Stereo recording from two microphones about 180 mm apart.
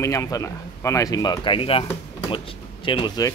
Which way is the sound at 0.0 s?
20° left (ahead or behind).